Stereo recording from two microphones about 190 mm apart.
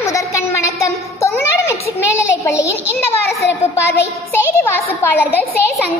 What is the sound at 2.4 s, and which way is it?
A child's voice, 15° left (ahead or behind).